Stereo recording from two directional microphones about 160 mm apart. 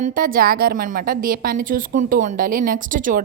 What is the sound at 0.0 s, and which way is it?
A woman's voice, 60° right (ahead or behind).